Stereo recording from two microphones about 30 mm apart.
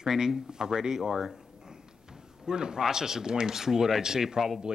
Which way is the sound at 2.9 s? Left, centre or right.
Centre.